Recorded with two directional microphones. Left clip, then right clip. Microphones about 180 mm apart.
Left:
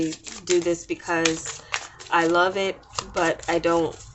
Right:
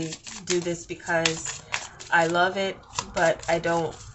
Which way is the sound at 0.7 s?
45° left (ahead or behind).